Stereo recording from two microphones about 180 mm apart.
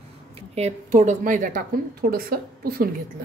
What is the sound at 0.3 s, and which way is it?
A woman's voice, 35° right (ahead or behind).